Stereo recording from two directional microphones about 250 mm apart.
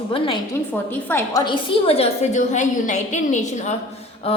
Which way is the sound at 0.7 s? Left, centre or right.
Centre.